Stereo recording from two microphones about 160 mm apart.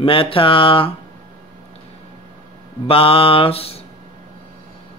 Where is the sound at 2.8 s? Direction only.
35° left (ahead or behind).